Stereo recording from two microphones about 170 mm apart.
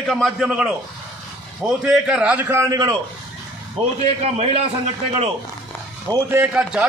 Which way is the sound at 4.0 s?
40° right (ahead or behind).